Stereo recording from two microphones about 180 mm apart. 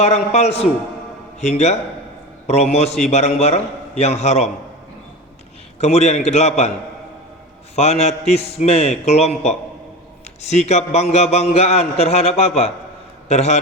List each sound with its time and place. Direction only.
0.0 s a man's voice: 35° left (ahead or behind)
5.8 s a man's voice: 40° left (ahead or behind)
7.8 s a man's voice: 35° left (ahead or behind)